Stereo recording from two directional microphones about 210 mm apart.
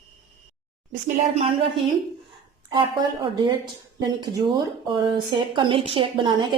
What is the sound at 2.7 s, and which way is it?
A woman's voice, 20° right (ahead or behind).